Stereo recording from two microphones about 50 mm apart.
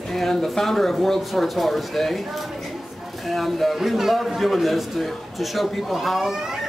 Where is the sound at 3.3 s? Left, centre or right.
Centre.